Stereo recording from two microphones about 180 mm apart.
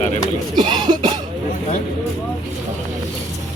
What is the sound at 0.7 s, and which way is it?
Cough, 25° right (ahead or behind).